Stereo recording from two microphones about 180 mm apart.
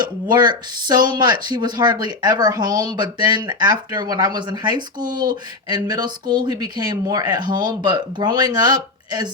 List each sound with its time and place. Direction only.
0.0 s speech: 25° right (ahead or behind)